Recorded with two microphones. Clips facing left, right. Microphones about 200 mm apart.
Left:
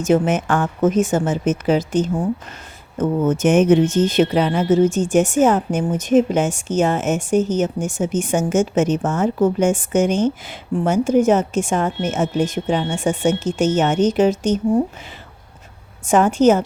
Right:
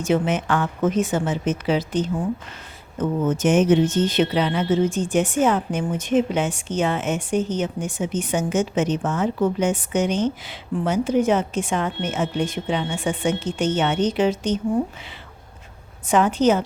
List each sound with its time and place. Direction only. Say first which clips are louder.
0.0 s speech: left 4 dB; 45° left (ahead or behind)
16.0 s speech: left 4 dB; 45° left (ahead or behind)